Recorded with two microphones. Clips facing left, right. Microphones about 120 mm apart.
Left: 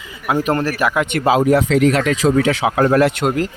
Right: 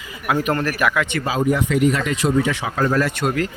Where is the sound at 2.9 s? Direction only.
60° left (ahead or behind).